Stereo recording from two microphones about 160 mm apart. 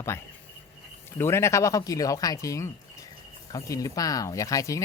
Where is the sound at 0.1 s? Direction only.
15° left (ahead or behind).